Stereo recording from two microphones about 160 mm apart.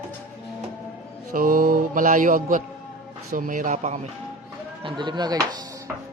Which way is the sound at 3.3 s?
55° right (ahead or behind).